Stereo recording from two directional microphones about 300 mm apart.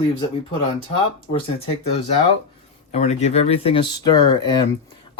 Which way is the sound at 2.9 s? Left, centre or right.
Left.